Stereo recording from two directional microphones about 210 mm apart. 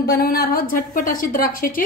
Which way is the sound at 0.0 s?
50° left (ahead or behind).